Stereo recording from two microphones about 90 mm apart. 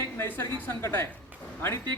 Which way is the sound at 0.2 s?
25° left (ahead or behind).